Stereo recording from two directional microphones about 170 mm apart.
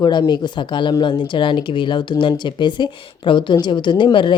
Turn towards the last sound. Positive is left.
turn(degrees=30)  # may be behind; listen again after turning